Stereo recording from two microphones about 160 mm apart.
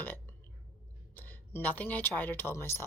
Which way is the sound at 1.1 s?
10° left (ahead or behind).